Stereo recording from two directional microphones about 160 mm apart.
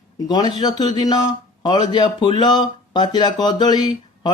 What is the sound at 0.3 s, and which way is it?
Speech, 25° left (ahead or behind).